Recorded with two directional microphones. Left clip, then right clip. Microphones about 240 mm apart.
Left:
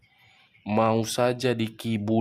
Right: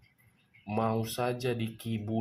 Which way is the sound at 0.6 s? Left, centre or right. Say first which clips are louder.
Left 8 dB; left.